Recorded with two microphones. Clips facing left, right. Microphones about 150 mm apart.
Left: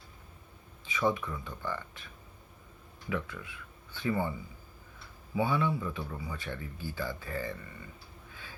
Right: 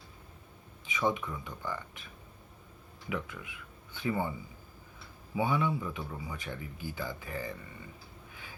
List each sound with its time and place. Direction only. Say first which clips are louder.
0.9 s a man's voice: left 1 dB; 20° right (ahead or behind)
3.1 s a man's voice: left 2 dB; 20° right (ahead or behind)